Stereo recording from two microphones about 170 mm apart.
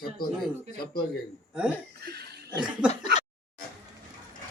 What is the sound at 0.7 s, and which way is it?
Speech, 65° left (ahead or behind).